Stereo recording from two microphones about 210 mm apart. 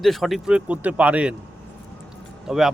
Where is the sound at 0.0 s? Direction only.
Centre (ahead or behind).